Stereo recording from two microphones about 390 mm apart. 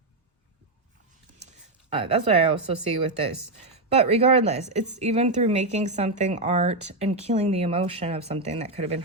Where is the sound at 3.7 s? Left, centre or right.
Centre.